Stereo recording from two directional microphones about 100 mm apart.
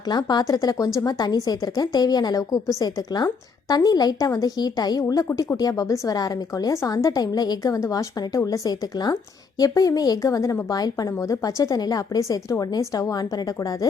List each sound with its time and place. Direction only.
0.1 s a woman's voice: 45° left (ahead or behind)
3.7 s a woman's voice: 40° left (ahead or behind)